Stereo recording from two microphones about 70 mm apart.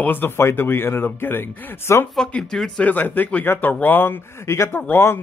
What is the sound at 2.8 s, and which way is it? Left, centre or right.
Speech, left.